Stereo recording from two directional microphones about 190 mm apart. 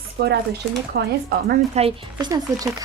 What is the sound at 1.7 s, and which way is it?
Speech, 25° right (ahead or behind).